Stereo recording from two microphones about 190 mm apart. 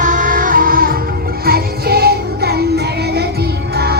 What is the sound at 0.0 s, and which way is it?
Music, 45° right (ahead or behind).